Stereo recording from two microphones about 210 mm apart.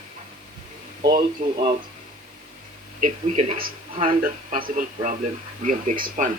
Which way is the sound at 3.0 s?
40° right (ahead or behind).